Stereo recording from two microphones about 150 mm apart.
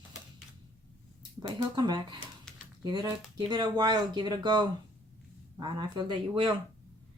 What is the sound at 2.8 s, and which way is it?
A woman's voice, 25° right (ahead or behind).